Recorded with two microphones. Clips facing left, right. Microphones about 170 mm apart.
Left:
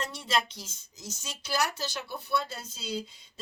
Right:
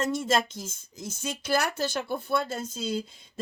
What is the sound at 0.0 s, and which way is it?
Speech, 45° right (ahead or behind).